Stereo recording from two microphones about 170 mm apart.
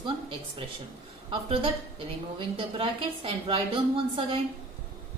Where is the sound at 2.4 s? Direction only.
30° right (ahead or behind).